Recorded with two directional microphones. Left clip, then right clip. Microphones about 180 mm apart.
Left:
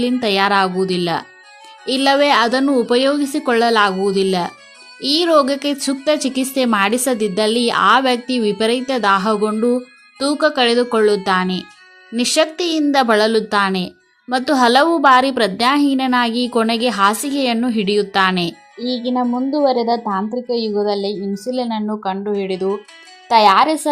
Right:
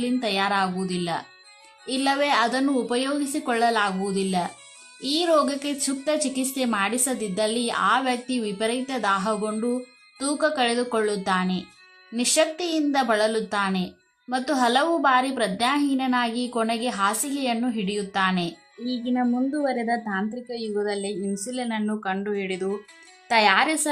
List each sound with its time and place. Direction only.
0.0 s a woman's voice: 30° left (ahead or behind)
18.9 s a woman's voice: 20° left (ahead or behind)